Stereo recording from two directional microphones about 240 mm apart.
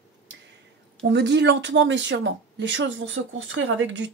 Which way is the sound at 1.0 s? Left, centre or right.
Right.